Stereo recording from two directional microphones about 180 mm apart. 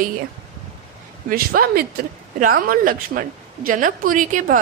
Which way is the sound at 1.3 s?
55° right (ahead or behind).